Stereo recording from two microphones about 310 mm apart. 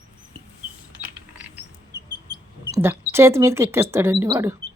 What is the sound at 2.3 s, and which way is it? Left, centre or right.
Speech, centre.